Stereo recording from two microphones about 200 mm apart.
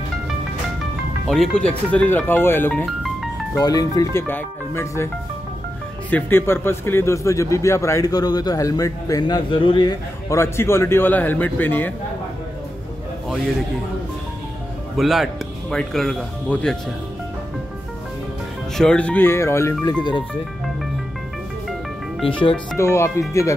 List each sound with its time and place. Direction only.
1.3 s a man's voice: 5° left (ahead or behind)
3.5 s a man's voice: 20° left (ahead or behind)
15.0 s speech: centre (ahead or behind)
18.8 s a man's voice: 5° left (ahead or behind); by 20.2 s 20° left (ahead or behind)
22.2 s speech: 25° left (ahead or behind)
22.8 s a man's voice: 15° left (ahead or behind)